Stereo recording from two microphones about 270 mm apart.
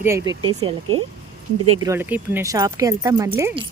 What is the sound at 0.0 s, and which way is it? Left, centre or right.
Speech, centre.